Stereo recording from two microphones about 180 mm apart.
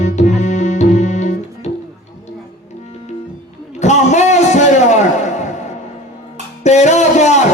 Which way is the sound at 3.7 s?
40° left (ahead or behind).